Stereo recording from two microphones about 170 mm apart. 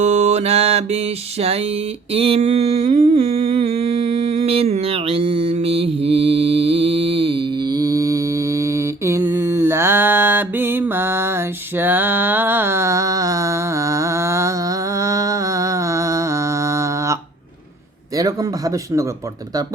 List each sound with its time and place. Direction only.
0.0 s music: 40° right (ahead or behind)
2.1 s humming: 35° right (ahead or behind); by 17.2 s 20° right (ahead or behind)
18.2 s speech: 20° right (ahead or behind)